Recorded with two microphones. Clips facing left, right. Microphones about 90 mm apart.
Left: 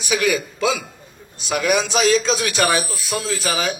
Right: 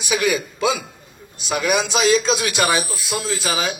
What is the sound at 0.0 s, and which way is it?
Speech, 20° right (ahead or behind).